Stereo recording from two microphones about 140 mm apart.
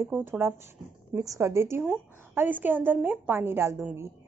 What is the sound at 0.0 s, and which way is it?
A woman's voice, 15° right (ahead or behind).